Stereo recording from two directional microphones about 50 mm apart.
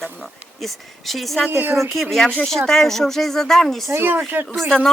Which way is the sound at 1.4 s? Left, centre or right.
Right.